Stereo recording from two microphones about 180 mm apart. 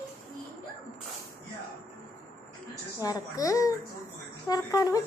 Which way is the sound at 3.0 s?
20° left (ahead or behind).